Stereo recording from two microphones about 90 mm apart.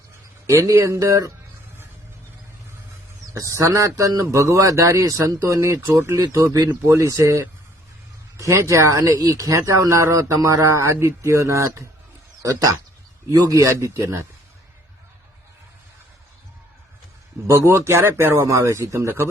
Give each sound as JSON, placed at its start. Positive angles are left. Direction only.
{"t": 0.4, "sound": "speech", "side_deg": -30}
{"t": 3.3, "sound": "speech", "side_deg": -35}
{"t": 6.8, "sound": "speech", "side_deg": -30}
{"t": 17.4, "sound": "speech", "side_deg": -30}